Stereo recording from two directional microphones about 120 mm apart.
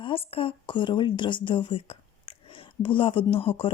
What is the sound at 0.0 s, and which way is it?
Speech, 50° left (ahead or behind).